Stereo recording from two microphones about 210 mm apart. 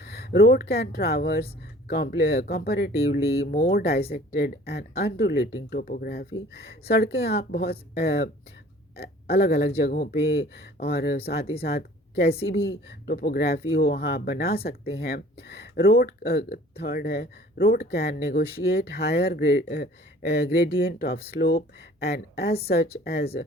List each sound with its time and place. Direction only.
0.0 s speech: 50° left (ahead or behind)